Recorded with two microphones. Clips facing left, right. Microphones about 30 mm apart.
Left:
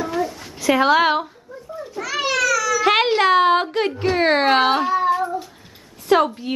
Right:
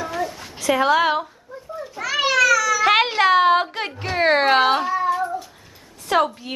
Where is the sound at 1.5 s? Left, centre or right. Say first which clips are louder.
Left 1 dB; centre.